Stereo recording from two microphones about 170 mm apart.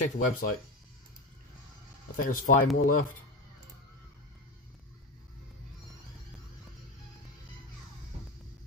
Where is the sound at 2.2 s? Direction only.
55° left (ahead or behind).